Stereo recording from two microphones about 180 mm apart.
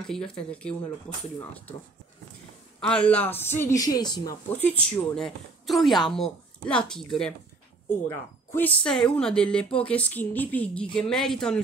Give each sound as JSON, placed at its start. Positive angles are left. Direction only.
{"t": 0.0, "sound": "a woman's voice", "side_deg": 5}
{"t": 2.8, "sound": "speech", "side_deg": 5}
{"t": 4.5, "sound": "a woman's voice", "side_deg": 10}
{"t": 8.5, "sound": "speech", "side_deg": 5}